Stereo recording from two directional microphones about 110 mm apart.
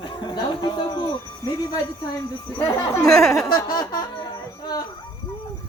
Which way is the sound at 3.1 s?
5° left (ahead or behind).